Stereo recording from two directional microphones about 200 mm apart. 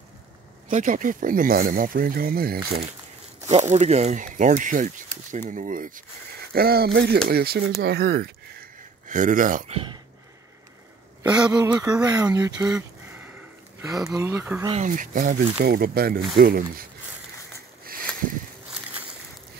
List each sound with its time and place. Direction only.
0.7 s speech: 40° right (ahead or behind)
3.4 s speech: 35° right (ahead or behind); by 8.3 s 55° right (ahead or behind)
9.0 s speech: 40° right (ahead or behind)
11.6 s speech: 15° right (ahead or behind)
13.7 s speech: 15° right (ahead or behind)
14.7 s speech: 40° right (ahead or behind)